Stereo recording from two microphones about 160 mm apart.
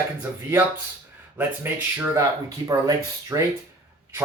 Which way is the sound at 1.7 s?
15° right (ahead or behind).